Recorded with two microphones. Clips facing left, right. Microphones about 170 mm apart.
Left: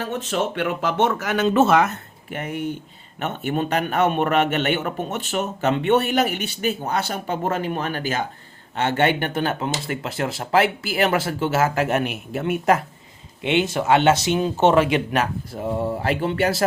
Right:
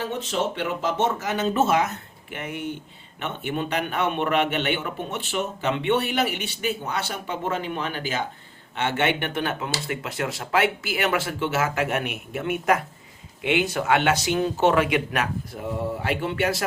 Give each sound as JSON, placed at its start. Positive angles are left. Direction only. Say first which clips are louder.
{"t": 0.0, "sound": "speech", "louder": "left 2 dB", "side_deg": 50}
{"t": 2.3, "sound": "a man's voice", "louder": "left 4 dB", "side_deg": 40}